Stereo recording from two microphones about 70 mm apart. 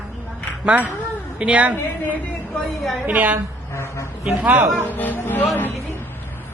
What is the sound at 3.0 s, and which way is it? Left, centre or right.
Speech, right.